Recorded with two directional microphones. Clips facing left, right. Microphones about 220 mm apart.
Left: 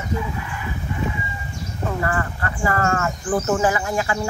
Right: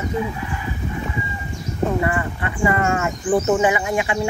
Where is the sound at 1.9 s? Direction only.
15° right (ahead or behind).